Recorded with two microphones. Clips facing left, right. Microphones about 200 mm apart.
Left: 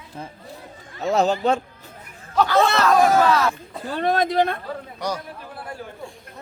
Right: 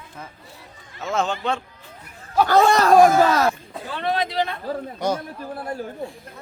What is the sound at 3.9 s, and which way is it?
Speech, 45° left (ahead or behind).